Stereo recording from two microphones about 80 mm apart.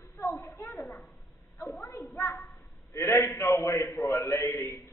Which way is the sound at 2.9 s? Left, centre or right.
Left.